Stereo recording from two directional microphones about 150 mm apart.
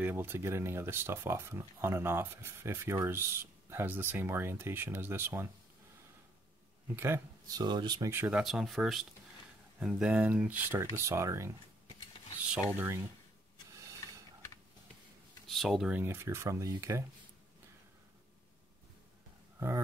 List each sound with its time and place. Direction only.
0.0 s speech: 15° right (ahead or behind)
7.0 s speech: 20° right (ahead or behind)
8.1 s speech: 10° right (ahead or behind)
12.7 s speech: 15° right (ahead or behind)
15.4 s speech: centre (ahead or behind)
16.0 s speech: 15° right (ahead or behind)